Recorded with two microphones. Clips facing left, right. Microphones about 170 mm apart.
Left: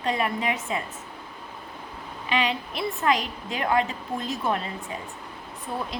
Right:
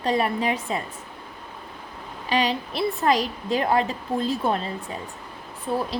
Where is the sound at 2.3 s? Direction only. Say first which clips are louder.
Right 3 dB; 35° right (ahead or behind).